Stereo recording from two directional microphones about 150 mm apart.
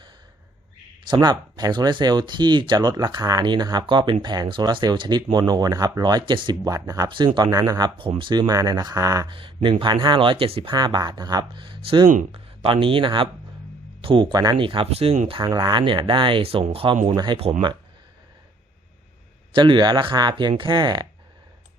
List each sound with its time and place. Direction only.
1.0 s speech: 30° right (ahead or behind)
9.3 s speech: 35° right (ahead or behind)
10.8 s speech: 30° right (ahead or behind); by 15.4 s 45° right (ahead or behind)
15.4 s speech: 30° right (ahead or behind)
19.5 s speech: 30° right (ahead or behind)